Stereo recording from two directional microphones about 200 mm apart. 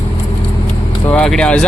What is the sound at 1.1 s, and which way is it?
Speech, 5° left (ahead or behind).